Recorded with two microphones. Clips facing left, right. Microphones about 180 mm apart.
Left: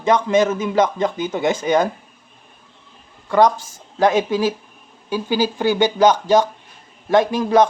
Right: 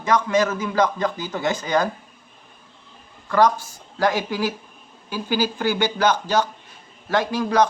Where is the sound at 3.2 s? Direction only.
20° left (ahead or behind).